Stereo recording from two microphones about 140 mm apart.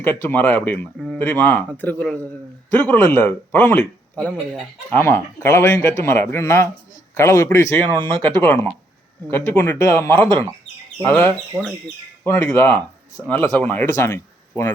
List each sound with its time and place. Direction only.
0.0 s a man's voice: 15° left (ahead or behind)
1.2 s a man's voice: 15° left (ahead or behind)
11.5 s speech: 20° right (ahead or behind)
12.2 s speech: 20° left (ahead or behind)